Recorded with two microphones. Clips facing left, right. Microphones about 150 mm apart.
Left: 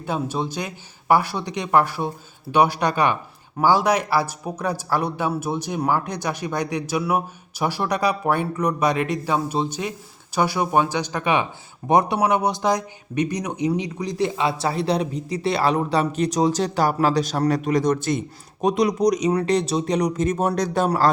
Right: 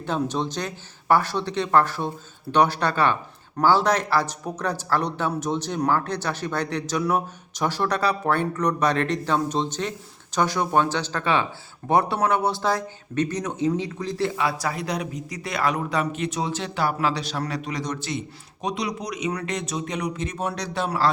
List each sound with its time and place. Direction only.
0.0 s speech: 10° left (ahead or behind); by 21.1 s 45° left (ahead or behind)